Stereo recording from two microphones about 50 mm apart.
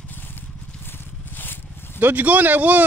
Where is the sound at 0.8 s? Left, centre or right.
Left.